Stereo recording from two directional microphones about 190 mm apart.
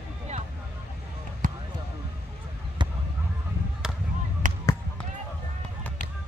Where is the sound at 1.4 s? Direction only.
45° right (ahead or behind).